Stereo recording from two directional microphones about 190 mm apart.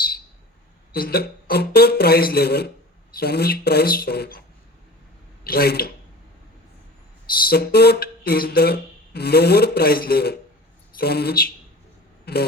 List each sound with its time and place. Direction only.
0.9 s speech: 55° left (ahead or behind)
7.4 s speech: 55° left (ahead or behind)
12.2 s a sound: 60° left (ahead or behind)